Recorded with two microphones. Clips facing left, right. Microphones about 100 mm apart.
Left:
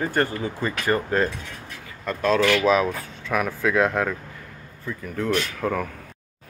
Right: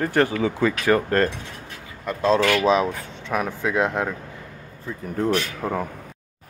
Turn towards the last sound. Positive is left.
turn(degrees=-20)  # may be behind; listen again after turning